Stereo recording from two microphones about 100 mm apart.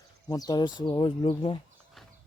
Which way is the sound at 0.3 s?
40° left (ahead or behind).